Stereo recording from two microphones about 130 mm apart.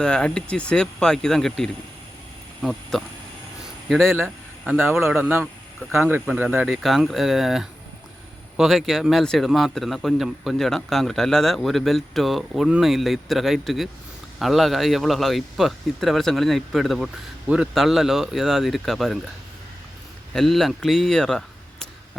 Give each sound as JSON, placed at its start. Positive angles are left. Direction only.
{"t": 0.0, "sound": "a man's voice", "side_deg": 5}
{"t": 4.8, "sound": "speech", "side_deg": -20}
{"t": 5.2, "sound": "speech", "side_deg": -10}
{"t": 20.3, "sound": "speech", "side_deg": 0}